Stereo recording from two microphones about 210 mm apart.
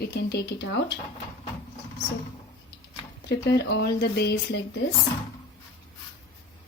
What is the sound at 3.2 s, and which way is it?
Speech, 55° left (ahead or behind).